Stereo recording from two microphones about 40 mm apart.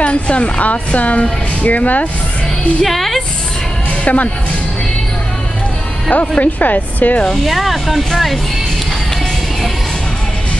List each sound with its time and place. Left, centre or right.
0.0 s a woman's voice: left
2.8 s speech: centre
4.0 s a woman's voice: left
6.1 s a woman's voice: left
7.4 s speech: centre